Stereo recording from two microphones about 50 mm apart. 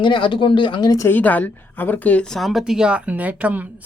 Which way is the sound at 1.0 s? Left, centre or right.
Left.